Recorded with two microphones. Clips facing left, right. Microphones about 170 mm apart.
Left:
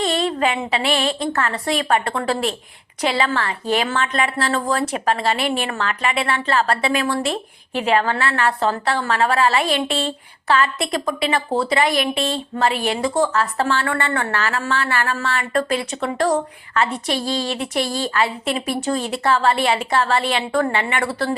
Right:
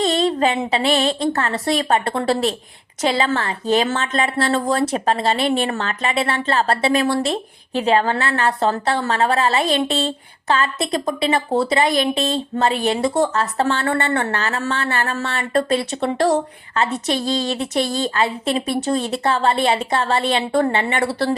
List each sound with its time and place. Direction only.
0.0 s a woman's voice: 40° right (ahead or behind)